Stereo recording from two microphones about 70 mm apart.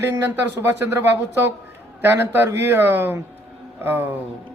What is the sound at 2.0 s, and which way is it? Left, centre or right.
Speech, right.